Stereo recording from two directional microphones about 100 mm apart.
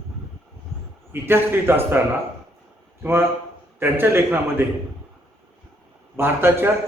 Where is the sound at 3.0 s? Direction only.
25° right (ahead or behind).